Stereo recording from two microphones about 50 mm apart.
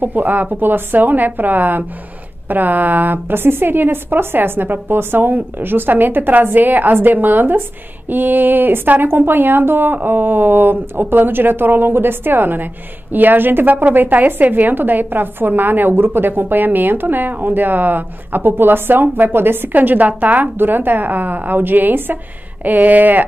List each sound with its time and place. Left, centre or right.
0.0 s a woman's voice: right
19.7 s a woman's voice: right
20.5 s a woman's voice: right